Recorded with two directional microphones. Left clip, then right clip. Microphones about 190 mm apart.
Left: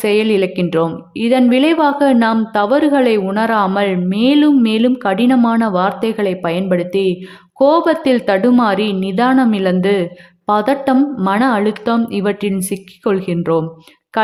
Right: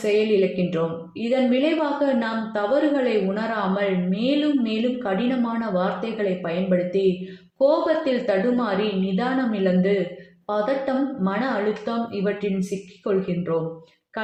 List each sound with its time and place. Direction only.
0.0 s a woman's voice: 40° left (ahead or behind)